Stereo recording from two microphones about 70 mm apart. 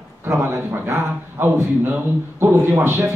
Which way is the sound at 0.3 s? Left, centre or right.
Right.